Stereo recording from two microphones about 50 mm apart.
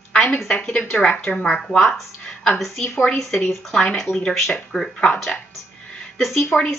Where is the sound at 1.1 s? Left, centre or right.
Left.